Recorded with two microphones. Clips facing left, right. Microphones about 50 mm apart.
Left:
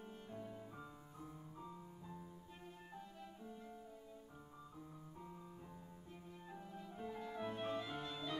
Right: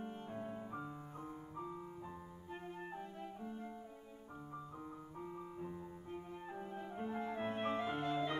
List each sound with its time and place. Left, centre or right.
0.0 s music: right
2.9 s music: right
5.2 s music: right